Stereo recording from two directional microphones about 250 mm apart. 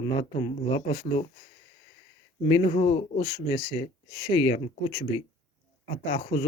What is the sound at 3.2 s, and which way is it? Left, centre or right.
Speech, left.